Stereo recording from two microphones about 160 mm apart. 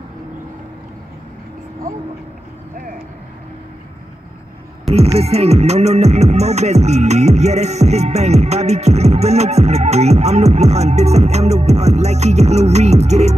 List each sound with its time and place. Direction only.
4.8 s music: 40° right (ahead or behind)